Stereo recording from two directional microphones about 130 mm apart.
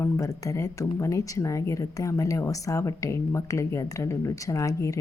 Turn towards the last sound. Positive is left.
turn(degrees=25)  # may be behind; listen again after turning